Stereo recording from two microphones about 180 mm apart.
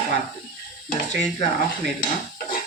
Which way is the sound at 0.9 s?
40° left (ahead or behind).